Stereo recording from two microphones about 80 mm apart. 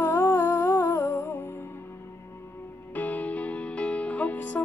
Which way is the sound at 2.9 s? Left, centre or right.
Centre.